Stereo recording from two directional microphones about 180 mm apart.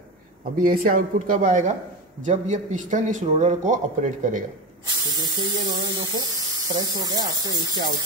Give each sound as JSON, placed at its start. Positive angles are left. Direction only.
{"t": 0.7, "sound": "a man's voice", "side_deg": -50}
{"t": 4.8, "sound": "speech", "side_deg": -25}